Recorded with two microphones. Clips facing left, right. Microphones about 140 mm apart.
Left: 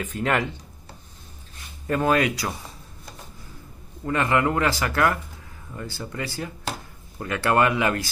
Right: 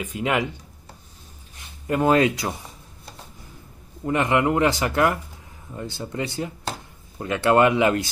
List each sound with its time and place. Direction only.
0.0 s speech: 10° right (ahead or behind)
1.9 s speech: 20° right (ahead or behind)
4.0 s speech: 20° right (ahead or behind)